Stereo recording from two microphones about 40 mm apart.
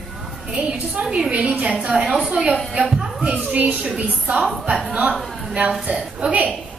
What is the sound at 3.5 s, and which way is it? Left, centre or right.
Speech, right.